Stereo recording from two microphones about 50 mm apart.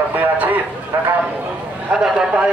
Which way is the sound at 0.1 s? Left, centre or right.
Right.